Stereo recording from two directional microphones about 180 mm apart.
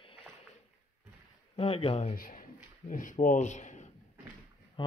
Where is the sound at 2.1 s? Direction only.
50° left (ahead or behind).